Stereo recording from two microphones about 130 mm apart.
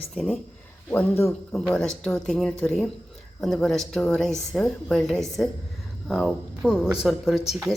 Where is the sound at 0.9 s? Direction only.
15° left (ahead or behind).